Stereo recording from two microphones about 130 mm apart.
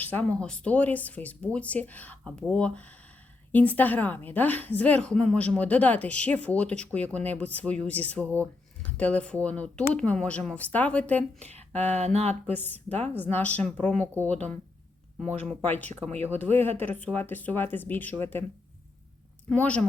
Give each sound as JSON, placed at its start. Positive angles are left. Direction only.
{"t": 0.0, "sound": "a woman's voice", "side_deg": 10}
{"t": 11.4, "sound": "a sound", "side_deg": -55}
{"t": 11.9, "sound": "speech", "side_deg": -55}
{"t": 12.5, "sound": "a woman's voice", "side_deg": 15}
{"t": 15.6, "sound": "a woman's voice", "side_deg": 15}
{"t": 19.5, "sound": "a woman's voice", "side_deg": 10}